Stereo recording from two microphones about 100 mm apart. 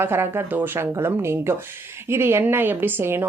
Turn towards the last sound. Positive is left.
turn(degrees=-20)  # may be behind; listen again after turning